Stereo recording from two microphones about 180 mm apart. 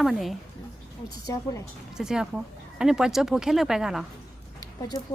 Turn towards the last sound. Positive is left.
turn(degrees=20)  # may be behind; listen again after turning